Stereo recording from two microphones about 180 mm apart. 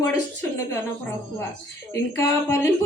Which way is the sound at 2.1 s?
15° left (ahead or behind).